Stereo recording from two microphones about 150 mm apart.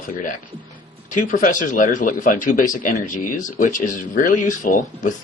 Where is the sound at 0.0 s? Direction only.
60° left (ahead or behind).